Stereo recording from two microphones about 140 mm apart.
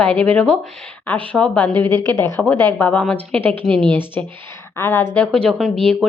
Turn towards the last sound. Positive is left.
turn(degrees=5)  # may be behind; listen again after turning